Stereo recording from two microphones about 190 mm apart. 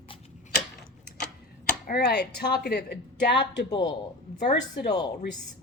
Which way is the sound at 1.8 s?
55° left (ahead or behind).